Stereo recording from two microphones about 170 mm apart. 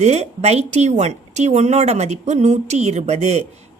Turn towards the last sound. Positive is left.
turn(degrees=-40)  # may be behind; listen again after turning